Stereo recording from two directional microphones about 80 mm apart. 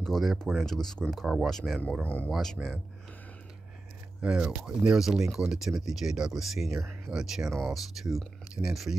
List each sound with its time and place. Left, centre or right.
0.0 s speech: centre
1.2 s speech: centre
1.5 s speech: centre
2.0 s speech: left
4.2 s speech: centre